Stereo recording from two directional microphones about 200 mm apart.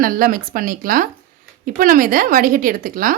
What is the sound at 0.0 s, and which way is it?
A woman's voice, 45° right (ahead or behind).